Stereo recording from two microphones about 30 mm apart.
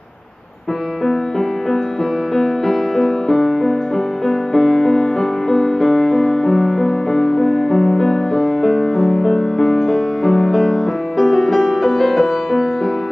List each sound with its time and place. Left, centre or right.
2.3 s music: centre